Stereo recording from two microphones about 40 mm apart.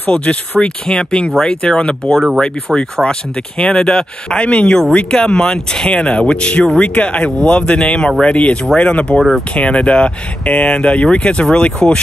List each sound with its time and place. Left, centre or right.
0.0 s speech: left
0.6 s speech: centre; by 7.3 s left
7.3 s speech: left